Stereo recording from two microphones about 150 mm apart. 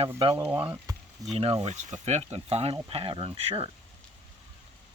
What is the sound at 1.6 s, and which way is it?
Speech, 50° right (ahead or behind).